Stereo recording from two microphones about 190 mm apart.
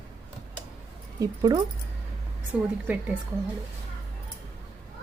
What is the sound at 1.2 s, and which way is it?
Speech, 20° right (ahead or behind).